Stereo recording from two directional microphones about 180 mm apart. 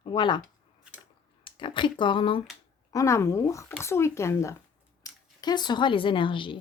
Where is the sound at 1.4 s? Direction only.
30° left (ahead or behind).